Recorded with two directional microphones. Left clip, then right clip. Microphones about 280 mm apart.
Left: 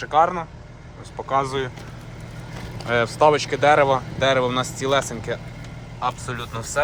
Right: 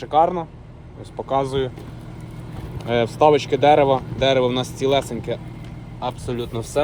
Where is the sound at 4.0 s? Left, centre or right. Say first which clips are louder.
Right 1 dB; left.